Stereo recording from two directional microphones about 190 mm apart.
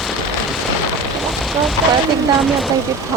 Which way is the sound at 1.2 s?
Centre (ahead or behind).